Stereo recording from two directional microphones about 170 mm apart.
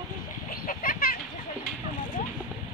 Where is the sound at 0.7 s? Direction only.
55° left (ahead or behind).